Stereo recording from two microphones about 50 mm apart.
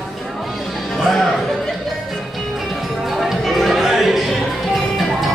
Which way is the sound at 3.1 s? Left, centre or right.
Centre.